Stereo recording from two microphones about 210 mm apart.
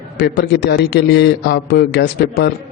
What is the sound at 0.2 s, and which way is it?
A man's voice, 50° left (ahead or behind).